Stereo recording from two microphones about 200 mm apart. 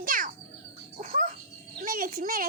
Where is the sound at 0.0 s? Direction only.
45° right (ahead or behind).